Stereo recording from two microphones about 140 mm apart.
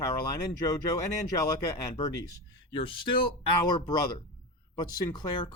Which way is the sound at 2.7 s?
40° left (ahead or behind).